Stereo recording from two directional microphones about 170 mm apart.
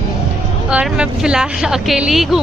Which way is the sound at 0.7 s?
5° right (ahead or behind).